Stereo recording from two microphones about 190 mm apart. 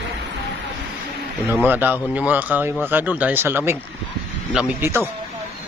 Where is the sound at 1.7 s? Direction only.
10° right (ahead or behind).